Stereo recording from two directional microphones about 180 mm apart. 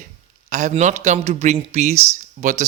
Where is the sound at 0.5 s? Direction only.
40° right (ahead or behind).